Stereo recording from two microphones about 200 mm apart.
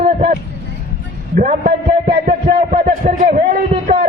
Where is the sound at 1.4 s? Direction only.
40° right (ahead or behind).